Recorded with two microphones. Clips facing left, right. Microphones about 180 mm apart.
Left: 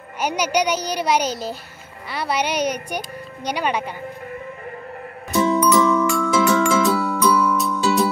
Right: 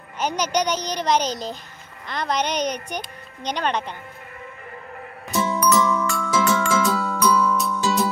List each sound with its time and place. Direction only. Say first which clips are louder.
0.2 s a child's voice: left 2 dB; 10° left (ahead or behind)
5.5 s music: left 3 dB; 20° left (ahead or behind)
6.0 s glockenspiel: left 6 dB; centre (ahead or behind)
6.5 s music: left 4 dB; 15° left (ahead or behind)
7.5 s music: left 3 dB; centre (ahead or behind)